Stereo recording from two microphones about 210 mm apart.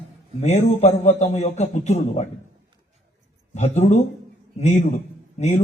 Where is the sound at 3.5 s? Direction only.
35° left (ahead or behind).